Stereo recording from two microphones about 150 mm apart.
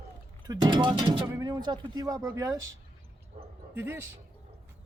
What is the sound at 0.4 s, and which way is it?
Speech, 25° right (ahead or behind).